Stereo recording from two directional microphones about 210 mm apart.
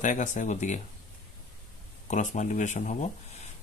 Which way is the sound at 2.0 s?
35° left (ahead or behind).